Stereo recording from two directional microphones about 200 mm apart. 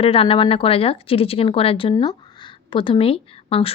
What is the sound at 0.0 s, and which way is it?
Speech, 30° left (ahead or behind).